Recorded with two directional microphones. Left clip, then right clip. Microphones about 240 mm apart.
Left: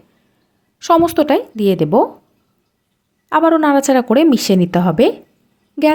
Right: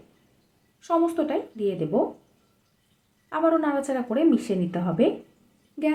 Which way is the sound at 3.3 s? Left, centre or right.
Left.